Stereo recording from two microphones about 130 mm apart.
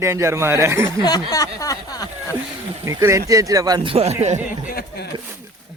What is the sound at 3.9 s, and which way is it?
Speech, 50° right (ahead or behind).